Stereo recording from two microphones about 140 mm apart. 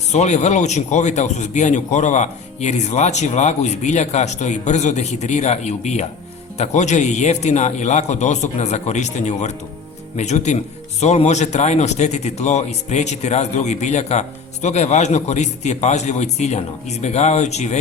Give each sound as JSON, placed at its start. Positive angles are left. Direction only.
{"t": 0.1, "sound": "speech", "side_deg": 55}